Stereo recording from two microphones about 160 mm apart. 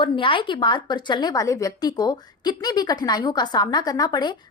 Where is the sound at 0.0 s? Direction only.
30° left (ahead or behind).